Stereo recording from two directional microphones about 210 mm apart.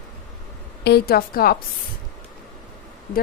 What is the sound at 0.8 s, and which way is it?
Speech, 50° left (ahead or behind).